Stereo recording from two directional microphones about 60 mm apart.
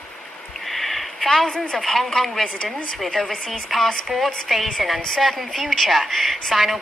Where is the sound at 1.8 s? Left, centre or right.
Centre.